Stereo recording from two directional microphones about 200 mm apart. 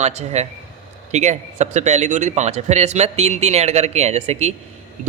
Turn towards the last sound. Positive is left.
turn(degrees=-35)  # may be behind; listen again after turning